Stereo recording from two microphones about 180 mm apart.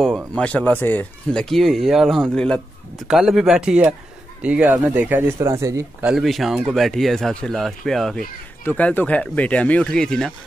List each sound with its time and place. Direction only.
0.0 s speech: 5° left (ahead or behind); by 6.0 s 15° right (ahead or behind)
6.0 s speech: centre (ahead or behind)